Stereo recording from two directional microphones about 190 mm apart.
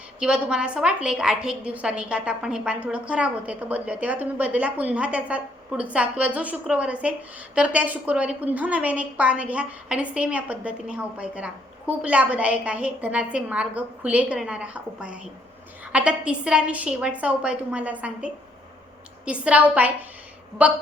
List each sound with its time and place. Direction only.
0.2 s a woman's voice: 5° right (ahead or behind)